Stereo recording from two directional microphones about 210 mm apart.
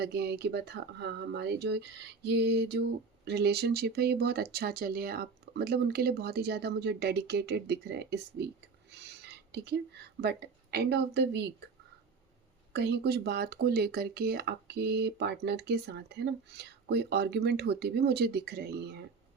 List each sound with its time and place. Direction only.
0.0 s speech: 50° right (ahead or behind)
8.9 s whispering: 55° right (ahead or behind)
9.5 s speech: 50° right (ahead or behind)
12.7 s speech: 50° right (ahead or behind)